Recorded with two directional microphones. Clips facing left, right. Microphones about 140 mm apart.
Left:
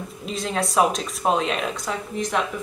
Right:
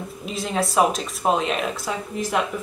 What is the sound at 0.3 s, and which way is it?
Speech, centre (ahead or behind).